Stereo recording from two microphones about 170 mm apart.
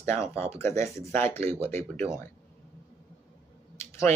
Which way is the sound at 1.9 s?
40° right (ahead or behind).